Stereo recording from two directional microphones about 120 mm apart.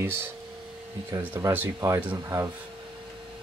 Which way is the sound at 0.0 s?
20° right (ahead or behind).